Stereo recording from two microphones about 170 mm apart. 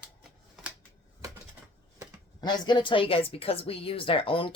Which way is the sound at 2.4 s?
25° left (ahead or behind).